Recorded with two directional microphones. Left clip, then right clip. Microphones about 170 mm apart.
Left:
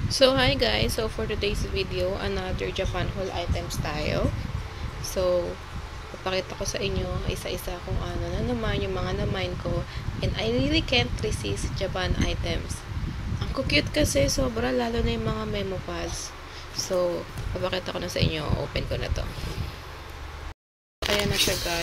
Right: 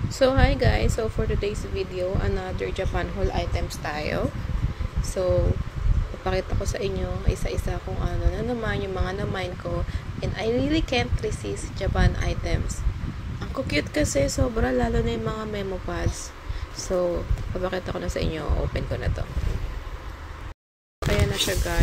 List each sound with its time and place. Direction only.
0.2 s speech: 10° right (ahead or behind)
3.3 s speech: 25° right (ahead or behind); by 19.2 s 10° right (ahead or behind)
21.0 s a sound: 10° right (ahead or behind)